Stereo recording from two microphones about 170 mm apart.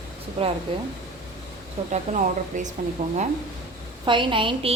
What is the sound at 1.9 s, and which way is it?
A woman's voice, 45° right (ahead or behind).